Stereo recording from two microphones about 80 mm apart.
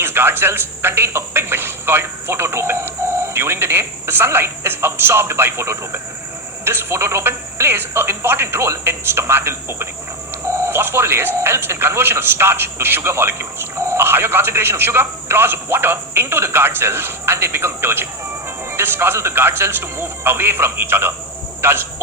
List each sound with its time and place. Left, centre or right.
0.0 s a man's voice: right